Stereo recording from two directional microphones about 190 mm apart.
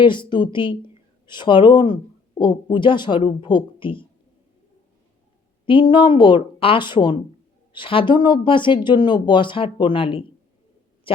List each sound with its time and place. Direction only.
0.0 s speech: 25° left (ahead or behind)
5.6 s speech: 25° left (ahead or behind)